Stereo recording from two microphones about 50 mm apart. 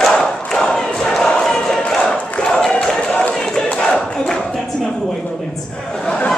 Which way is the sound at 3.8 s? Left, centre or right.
Centre.